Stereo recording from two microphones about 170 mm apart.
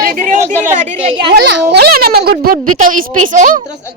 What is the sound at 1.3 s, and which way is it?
A child's voice, 80° right.